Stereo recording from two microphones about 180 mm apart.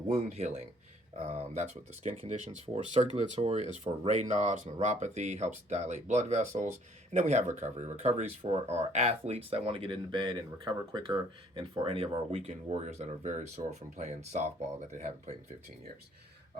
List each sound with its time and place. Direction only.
0.1 s speech: 35° right (ahead or behind)